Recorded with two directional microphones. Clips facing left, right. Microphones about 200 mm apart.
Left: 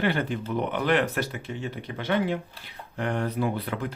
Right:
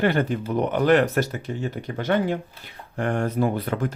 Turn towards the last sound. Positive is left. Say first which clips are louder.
# right 5 dB
turn(degrees=-45)  # may be behind; listen again after turning